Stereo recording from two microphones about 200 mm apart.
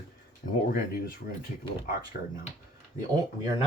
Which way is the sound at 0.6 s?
45° left (ahead or behind).